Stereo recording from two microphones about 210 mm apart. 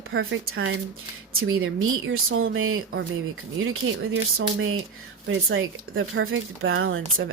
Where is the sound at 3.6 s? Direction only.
65° right (ahead or behind).